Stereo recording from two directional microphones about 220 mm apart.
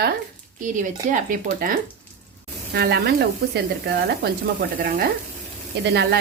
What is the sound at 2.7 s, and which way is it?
Speech, 45° right (ahead or behind).